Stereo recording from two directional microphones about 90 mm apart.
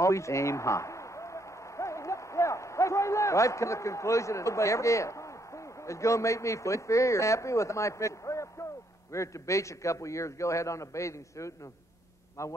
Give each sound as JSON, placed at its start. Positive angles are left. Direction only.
{"t": 0.0, "sound": "a man's voice", "side_deg": 35}